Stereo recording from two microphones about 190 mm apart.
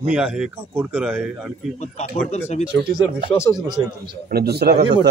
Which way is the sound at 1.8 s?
35° left (ahead or behind).